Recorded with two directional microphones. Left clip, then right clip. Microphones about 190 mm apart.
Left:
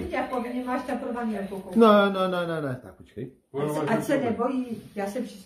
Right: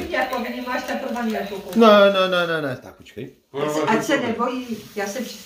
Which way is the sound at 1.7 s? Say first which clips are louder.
Right 6 dB; 5° left (ahead or behind).